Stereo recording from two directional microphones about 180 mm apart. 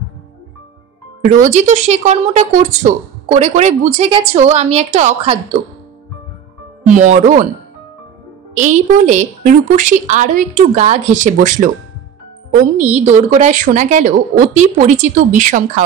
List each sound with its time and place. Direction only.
1.3 s a woman's voice: 45° right (ahead or behind)
7.0 s a woman's voice: 40° right (ahead or behind)
8.5 s a woman's voice: 45° right (ahead or behind)